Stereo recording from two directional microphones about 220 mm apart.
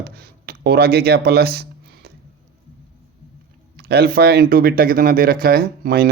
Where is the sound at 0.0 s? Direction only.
45° right (ahead or behind).